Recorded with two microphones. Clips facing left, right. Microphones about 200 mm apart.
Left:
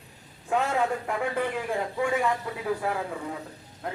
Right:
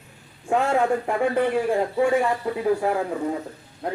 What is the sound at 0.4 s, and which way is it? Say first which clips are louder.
A man's voice: right 5 dB; 30° right (ahead or behind).